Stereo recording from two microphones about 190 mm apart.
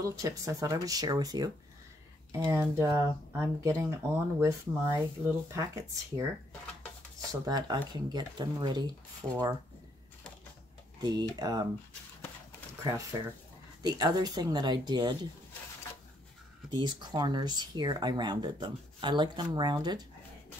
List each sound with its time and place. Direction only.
0.0 s speech: 15° right (ahead or behind)
7.4 s speech: 20° right (ahead or behind)
11.0 s speech: 20° right (ahead or behind)
13.8 s speech: 20° right (ahead or behind)
16.7 s speech: 25° right (ahead or behind)